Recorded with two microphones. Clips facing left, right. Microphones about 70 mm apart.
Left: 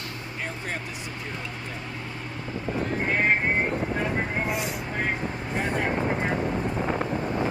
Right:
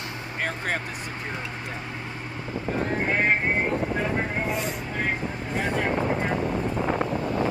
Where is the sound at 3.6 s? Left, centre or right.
Centre.